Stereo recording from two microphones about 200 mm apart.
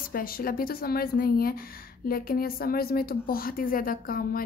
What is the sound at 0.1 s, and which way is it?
Speech, 45° left (ahead or behind).